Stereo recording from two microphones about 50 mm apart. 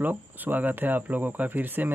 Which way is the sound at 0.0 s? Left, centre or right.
Right.